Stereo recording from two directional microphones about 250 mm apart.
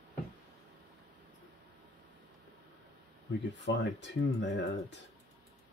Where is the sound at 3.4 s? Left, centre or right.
Left.